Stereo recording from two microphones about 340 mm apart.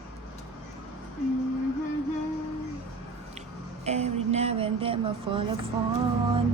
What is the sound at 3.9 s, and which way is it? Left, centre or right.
Speech, centre.